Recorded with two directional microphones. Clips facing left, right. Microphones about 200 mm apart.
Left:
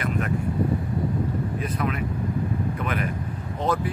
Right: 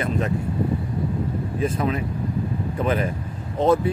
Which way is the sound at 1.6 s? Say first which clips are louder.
Right 4 dB; 25° right (ahead or behind).